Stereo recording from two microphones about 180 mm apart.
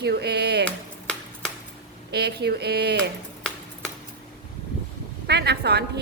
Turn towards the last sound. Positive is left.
turn(degrees=-65)  # may be behind; listen again after turning